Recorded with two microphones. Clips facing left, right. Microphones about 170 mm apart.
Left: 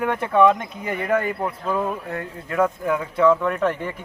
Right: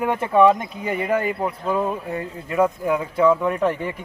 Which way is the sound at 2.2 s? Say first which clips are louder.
Right 1 dB; 20° right (ahead or behind).